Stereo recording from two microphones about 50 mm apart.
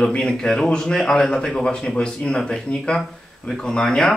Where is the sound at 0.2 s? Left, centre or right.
Centre.